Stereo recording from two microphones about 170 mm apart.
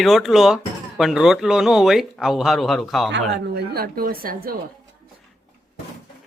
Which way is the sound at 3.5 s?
65° right (ahead or behind).